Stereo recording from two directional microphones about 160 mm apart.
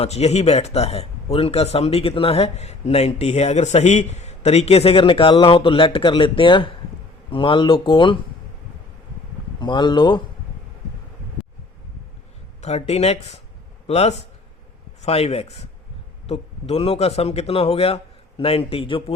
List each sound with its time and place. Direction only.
0.0 s speech: 40° left (ahead or behind)
9.6 s speech: 30° left (ahead or behind)
12.6 s speech: 45° left (ahead or behind)